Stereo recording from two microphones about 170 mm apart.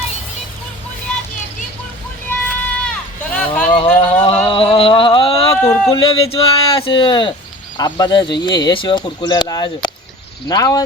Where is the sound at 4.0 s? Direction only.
35° left (ahead or behind).